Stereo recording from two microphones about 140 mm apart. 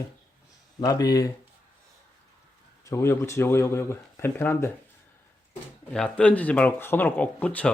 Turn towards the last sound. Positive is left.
turn(degrees=10)  # may be behind; listen again after turning